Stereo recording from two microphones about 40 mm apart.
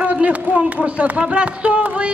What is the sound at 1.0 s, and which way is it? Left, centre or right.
Music, right.